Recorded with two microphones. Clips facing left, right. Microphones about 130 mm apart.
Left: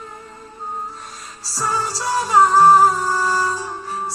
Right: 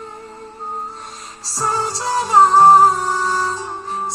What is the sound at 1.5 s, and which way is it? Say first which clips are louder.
Music: right 2 dB; 30° right (ahead or behind).